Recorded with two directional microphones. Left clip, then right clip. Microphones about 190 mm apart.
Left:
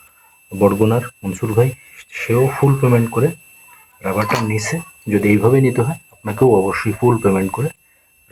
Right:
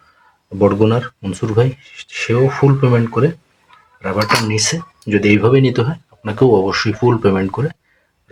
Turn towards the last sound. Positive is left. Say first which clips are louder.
# right 1 dB
turn(degrees=-15)  # may be behind; listen again after turning